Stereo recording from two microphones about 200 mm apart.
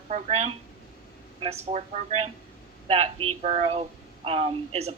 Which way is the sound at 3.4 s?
35° right (ahead or behind).